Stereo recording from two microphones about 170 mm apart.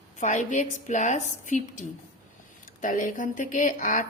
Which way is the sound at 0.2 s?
45° left (ahead or behind).